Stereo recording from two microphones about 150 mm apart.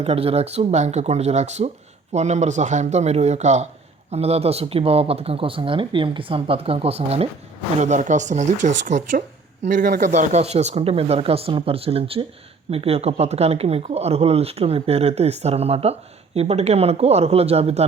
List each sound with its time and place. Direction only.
0.0 s speech: 40° right (ahead or behind)